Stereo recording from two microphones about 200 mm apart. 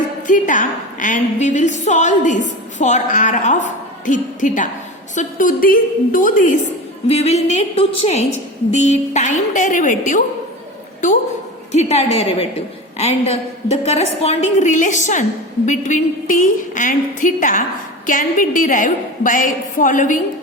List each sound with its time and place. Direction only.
0.3 s a woman's voice: 40° left (ahead or behind)
11.7 s a woman's voice: 35° left (ahead or behind)